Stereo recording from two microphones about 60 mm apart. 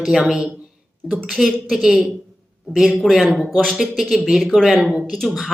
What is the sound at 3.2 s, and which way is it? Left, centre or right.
Speech, centre.